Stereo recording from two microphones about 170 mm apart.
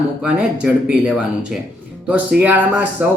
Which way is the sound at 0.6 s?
5° right (ahead or behind).